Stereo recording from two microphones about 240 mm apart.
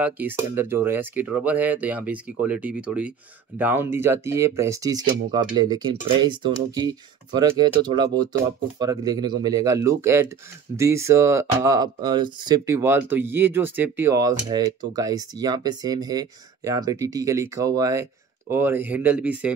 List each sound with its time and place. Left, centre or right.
0.0 s speech: centre